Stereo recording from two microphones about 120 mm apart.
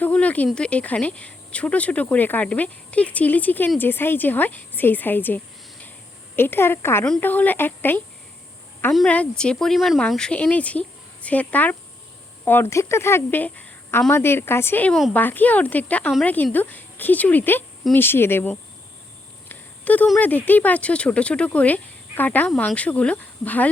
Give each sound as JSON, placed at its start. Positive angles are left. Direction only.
{"t": 0.0, "sound": "a woman's voice", "side_deg": 10}
{"t": 8.9, "sound": "a woman's voice", "side_deg": 5}
{"t": 19.5, "sound": "a sound", "side_deg": 15}
{"t": 20.1, "sound": "speech", "side_deg": 15}